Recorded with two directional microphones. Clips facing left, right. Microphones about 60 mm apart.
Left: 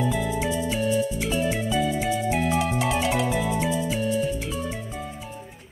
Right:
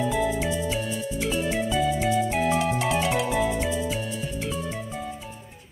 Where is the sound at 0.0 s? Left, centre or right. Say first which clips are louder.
Right 1 dB; centre.